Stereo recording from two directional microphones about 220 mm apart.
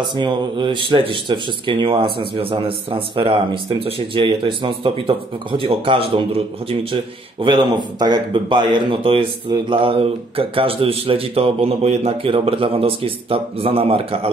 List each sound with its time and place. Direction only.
0.0 s speech: 20° right (ahead or behind)